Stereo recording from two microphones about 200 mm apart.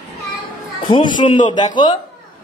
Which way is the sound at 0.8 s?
20° left (ahead or behind).